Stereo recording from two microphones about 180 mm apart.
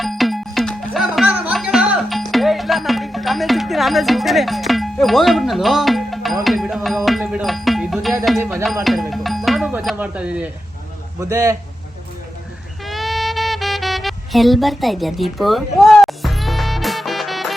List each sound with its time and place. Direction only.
0.0 s music: centre (ahead or behind)
8.4 s a man's voice: 10° right (ahead or behind)
8.6 s a man's voice: centre (ahead or behind); by 11.5 s 15° right (ahead or behind)
12.8 s music: centre (ahead or behind)